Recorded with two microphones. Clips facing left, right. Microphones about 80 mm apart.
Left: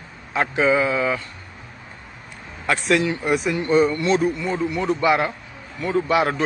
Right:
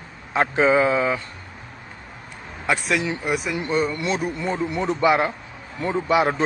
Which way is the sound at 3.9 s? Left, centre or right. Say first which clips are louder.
Left 5 dB; centre.